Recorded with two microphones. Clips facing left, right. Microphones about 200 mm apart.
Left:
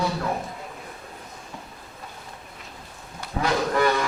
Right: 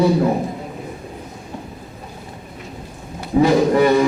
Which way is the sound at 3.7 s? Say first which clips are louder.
Right 8 dB; 20° right (ahead or behind).